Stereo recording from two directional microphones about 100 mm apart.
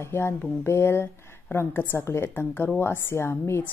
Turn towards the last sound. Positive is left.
turn(degrees=25)  # may be behind; listen again after turning